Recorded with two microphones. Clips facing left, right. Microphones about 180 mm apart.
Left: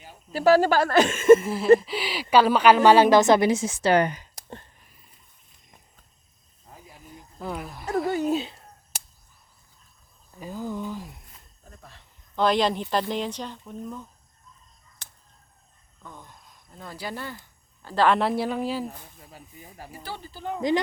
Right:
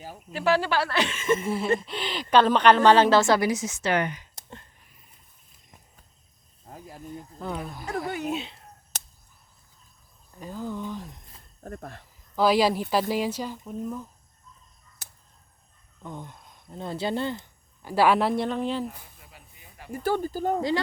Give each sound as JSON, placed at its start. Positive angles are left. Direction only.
{"t": 0.3, "sound": "a woman's voice", "side_deg": 40}
{"t": 1.4, "sound": "a woman's voice", "side_deg": 0}
{"t": 6.7, "sound": "cricket", "side_deg": -45}
{"t": 7.3, "sound": "speech", "side_deg": 5}
{"t": 7.9, "sound": "speech", "side_deg": 30}
{"t": 10.4, "sound": "a woman's voice", "side_deg": 10}
{"t": 11.6, "sound": "speech", "side_deg": -55}
{"t": 12.4, "sound": "speech", "side_deg": -5}
{"t": 16.0, "sound": "speech", "side_deg": -20}
{"t": 17.8, "sound": "speech", "side_deg": -10}
{"t": 19.3, "sound": "snake", "side_deg": 40}
{"t": 19.9, "sound": "speech", "side_deg": -50}